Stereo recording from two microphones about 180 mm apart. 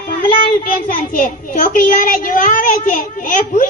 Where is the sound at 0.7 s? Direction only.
55° left (ahead or behind).